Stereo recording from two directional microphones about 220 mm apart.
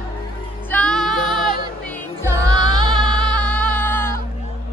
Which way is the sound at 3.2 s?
5° left (ahead or behind).